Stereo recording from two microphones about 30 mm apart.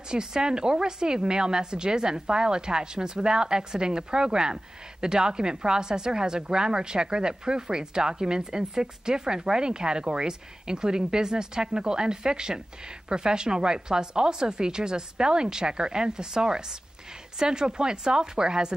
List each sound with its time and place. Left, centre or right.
0.1 s a woman's voice: right